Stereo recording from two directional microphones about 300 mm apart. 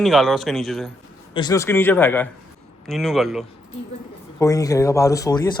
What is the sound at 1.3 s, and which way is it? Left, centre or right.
Speech, centre.